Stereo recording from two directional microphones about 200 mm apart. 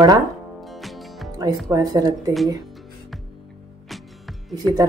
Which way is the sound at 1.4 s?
20° right (ahead or behind).